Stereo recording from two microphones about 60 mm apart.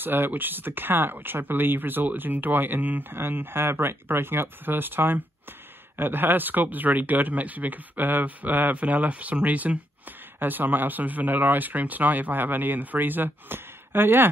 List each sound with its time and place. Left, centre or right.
0.0 s speech: right